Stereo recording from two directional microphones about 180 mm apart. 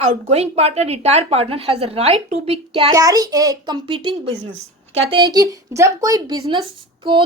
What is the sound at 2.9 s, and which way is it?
Speech, 20° right (ahead or behind).